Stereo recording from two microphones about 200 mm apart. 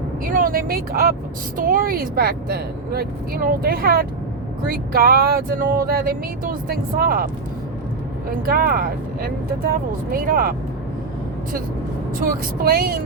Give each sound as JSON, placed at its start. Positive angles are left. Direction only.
{"t": 0.3, "sound": "speech", "side_deg": -45}
{"t": 8.4, "sound": "speech", "side_deg": -50}
{"t": 12.2, "sound": "speech", "side_deg": -45}